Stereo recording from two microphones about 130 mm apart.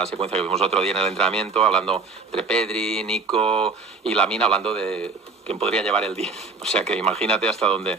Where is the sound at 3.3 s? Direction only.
45° right (ahead or behind).